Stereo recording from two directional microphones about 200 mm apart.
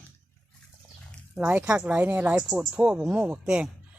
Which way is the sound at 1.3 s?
10° right (ahead or behind).